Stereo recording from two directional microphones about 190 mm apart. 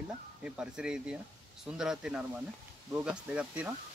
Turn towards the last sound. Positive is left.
turn(degrees=-5)  # may be behind; listen again after turning